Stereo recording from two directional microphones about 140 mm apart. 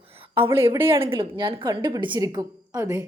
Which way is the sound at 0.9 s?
40° right (ahead or behind).